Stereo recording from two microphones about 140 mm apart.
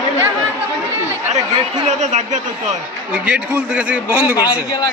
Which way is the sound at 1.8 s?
55° right (ahead or behind).